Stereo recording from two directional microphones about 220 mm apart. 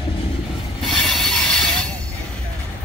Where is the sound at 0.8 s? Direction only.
Centre (ahead or behind).